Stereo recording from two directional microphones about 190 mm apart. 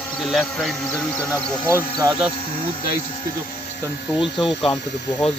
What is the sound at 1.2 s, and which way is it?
Speech, 20° left (ahead or behind).